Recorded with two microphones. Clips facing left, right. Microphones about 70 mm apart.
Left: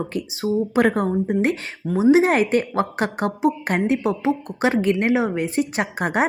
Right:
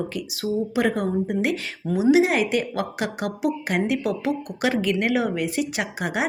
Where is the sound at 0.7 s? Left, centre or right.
Left.